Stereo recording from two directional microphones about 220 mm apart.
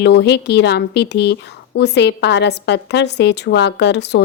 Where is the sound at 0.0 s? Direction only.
50° left (ahead or behind).